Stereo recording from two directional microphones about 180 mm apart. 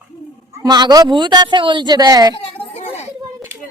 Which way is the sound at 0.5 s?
20° right (ahead or behind).